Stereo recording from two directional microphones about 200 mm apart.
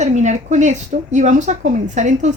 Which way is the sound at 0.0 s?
35° right (ahead or behind).